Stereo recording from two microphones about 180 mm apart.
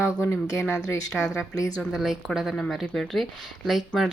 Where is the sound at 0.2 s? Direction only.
15° left (ahead or behind).